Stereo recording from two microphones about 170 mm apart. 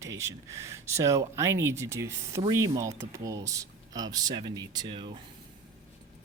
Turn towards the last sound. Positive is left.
turn(degrees=-30)  # may be behind; listen again after turning